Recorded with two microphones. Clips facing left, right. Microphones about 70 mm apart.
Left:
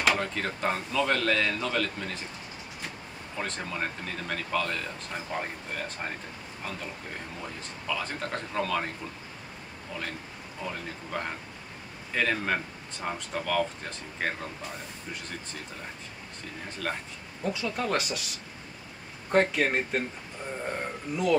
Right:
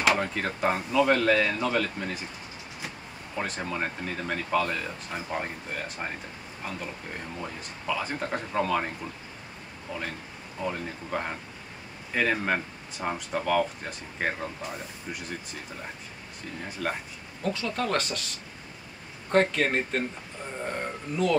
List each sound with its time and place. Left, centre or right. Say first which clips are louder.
0.0 s speech: right 2 dB; centre
3.3 s speech: right 2 dB; centre
7.3 s speech: right 2 dB; centre
16.8 s speech: right 2 dB; centre
17.4 s speech: right 1 dB; centre
19.3 s speech: right 1 dB; centre